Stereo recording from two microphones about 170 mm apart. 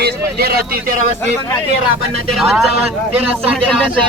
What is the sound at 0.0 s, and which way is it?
Speech, 70° right (ahead or behind).